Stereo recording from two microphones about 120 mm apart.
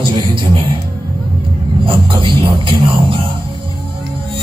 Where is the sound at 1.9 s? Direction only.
45° right (ahead or behind).